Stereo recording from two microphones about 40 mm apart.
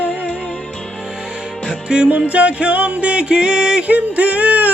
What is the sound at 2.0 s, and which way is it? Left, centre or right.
Music, right.